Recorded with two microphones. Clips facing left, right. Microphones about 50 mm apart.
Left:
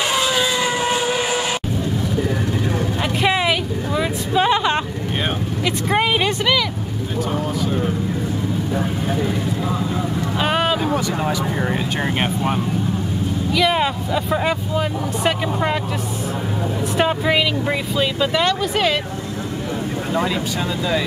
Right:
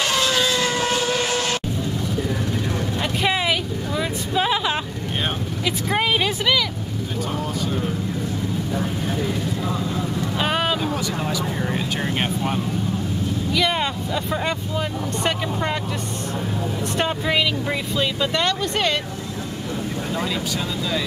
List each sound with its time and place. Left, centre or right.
0.1 s vehicle: centre
3.2 s vehicle: centre
5.9 s a sound: centre
7.6 s vehicle: centre
10.9 s vehicle: left
13.5 s speech: centre
16.9 s speech: centre